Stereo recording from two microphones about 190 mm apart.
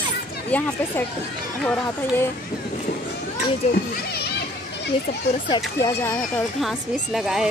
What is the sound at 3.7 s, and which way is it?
Speech, 55° left (ahead or behind).